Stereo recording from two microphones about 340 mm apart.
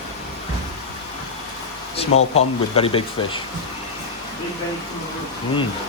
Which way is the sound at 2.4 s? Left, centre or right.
Centre.